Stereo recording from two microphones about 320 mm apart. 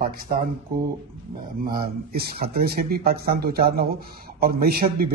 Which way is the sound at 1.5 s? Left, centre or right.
Right.